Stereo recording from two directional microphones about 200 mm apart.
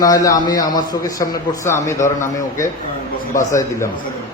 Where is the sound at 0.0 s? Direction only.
15° left (ahead or behind).